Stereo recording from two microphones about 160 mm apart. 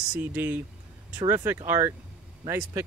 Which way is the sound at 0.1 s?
10° right (ahead or behind).